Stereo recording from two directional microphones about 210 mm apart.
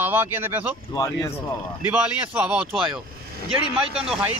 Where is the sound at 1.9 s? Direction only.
5° right (ahead or behind).